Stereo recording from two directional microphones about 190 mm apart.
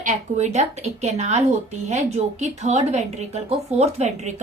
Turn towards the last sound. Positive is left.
turn(degrees=-35)  # may be behind; listen again after turning